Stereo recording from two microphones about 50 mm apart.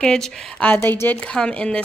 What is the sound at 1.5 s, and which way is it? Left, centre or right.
Speech, centre.